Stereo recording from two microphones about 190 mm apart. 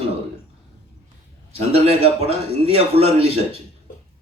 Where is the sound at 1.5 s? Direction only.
30° right (ahead or behind).